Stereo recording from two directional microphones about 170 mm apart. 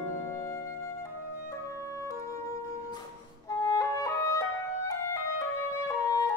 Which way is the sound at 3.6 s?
20° left (ahead or behind).